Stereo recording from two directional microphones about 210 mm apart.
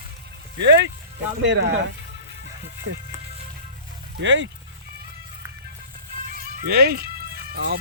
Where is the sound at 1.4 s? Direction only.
60° right (ahead or behind).